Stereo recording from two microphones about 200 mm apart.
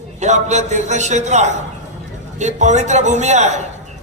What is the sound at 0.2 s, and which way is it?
A man's voice, 35° right (ahead or behind).